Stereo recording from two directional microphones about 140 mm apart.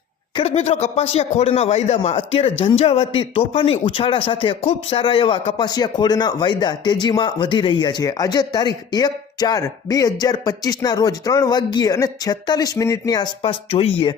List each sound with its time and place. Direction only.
0.3 s speech: 50° left (ahead or behind)